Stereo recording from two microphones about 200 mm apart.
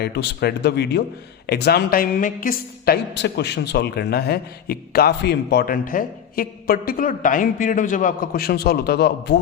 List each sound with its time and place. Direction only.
0.0 s a man's voice: 55° left (ahead or behind)